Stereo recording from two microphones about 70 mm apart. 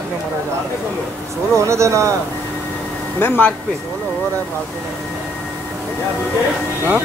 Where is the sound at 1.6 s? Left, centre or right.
Right.